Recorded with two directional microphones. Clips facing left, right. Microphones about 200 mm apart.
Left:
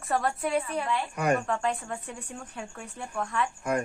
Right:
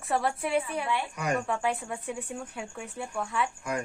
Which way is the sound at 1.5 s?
5° right (ahead or behind).